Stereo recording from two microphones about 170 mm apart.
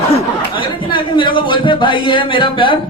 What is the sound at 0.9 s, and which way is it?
Speech, 30° left (ahead or behind).